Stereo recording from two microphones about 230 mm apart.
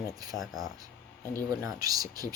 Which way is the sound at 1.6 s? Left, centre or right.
Centre.